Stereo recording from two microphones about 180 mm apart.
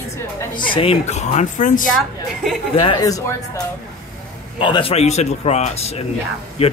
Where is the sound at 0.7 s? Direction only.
30° left (ahead or behind).